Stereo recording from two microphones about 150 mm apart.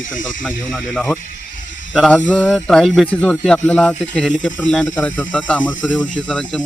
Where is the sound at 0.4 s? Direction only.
5° left (ahead or behind).